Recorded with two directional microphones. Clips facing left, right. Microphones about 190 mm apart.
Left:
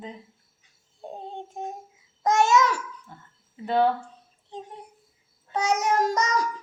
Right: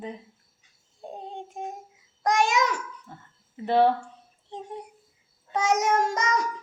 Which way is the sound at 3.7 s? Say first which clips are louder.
Right 2 dB; 25° right (ahead or behind).